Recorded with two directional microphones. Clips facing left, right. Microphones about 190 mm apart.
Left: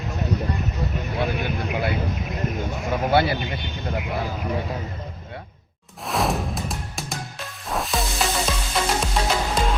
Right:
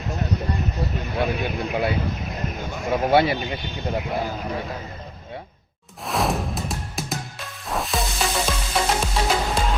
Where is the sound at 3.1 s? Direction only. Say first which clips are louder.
Right 2 dB; 20° right (ahead or behind).